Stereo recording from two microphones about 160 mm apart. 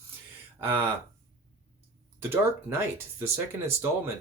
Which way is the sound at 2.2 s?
15° right (ahead or behind).